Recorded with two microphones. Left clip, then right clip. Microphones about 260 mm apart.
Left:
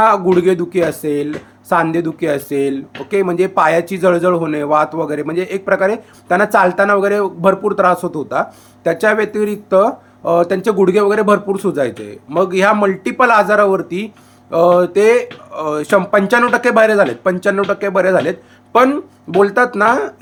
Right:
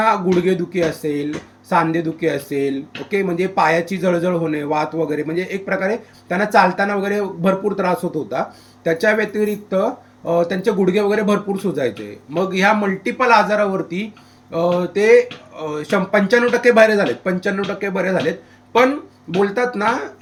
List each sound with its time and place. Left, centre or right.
0.0 s a man's voice: centre